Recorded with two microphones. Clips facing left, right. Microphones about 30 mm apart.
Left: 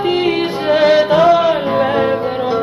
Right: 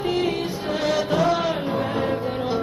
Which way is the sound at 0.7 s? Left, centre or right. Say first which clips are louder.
Left 12 dB; left.